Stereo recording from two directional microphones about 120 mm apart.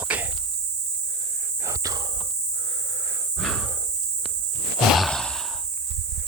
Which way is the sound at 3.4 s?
Centre (ahead or behind).